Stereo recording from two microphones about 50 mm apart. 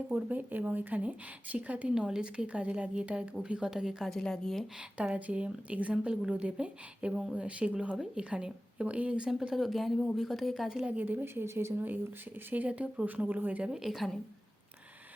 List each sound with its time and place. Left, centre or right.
0.3 s speech: right
2.0 s a woman's voice: centre
4.0 s a woman's voice: centre
5.1 s a woman's voice: right
9.6 s speech: centre
10.9 s speech: right
11.4 s speech: right
12.6 s a woman's voice: right
13.7 s speech: centre